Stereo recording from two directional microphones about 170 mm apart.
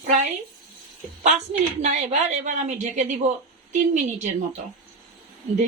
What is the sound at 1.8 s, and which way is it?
Speech, 45° right (ahead or behind).